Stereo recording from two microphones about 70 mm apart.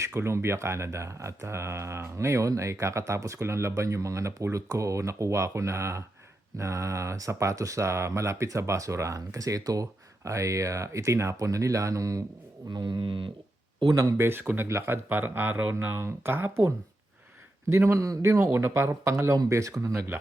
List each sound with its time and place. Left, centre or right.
0.0 s speech: right
12.7 s speech: right
13.9 s speech: right
14.2 s speech: right